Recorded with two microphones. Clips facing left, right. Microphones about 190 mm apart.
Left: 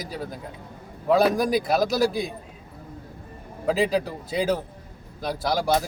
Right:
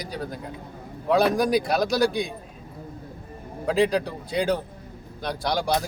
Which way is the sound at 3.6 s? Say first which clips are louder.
Right 1 dB; 5° left (ahead or behind).